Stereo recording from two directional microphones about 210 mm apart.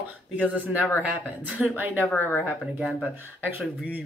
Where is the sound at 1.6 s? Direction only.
10° right (ahead or behind).